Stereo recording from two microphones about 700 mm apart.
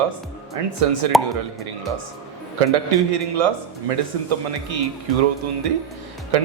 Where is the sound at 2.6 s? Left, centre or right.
Right.